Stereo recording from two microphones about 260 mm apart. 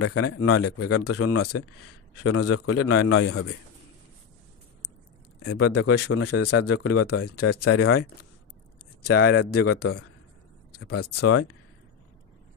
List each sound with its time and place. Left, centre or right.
0.0 s speech: left
5.4 s speech: left
9.0 s speech: left
9.5 s speech: left